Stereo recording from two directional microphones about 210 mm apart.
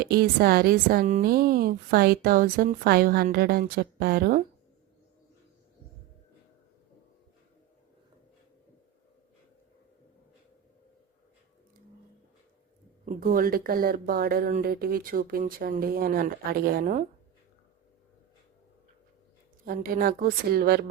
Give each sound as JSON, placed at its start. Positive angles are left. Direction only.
{"t": 0.0, "sound": "a woman's voice", "side_deg": -45}
{"t": 13.1, "sound": "a woman's voice", "side_deg": -40}
{"t": 19.6, "sound": "a woman's voice", "side_deg": -45}